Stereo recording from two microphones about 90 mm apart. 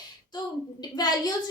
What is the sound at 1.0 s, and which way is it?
Speech, 50° left (ahead or behind).